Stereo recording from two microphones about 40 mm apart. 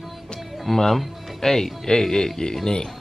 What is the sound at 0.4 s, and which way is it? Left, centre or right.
Music, centre.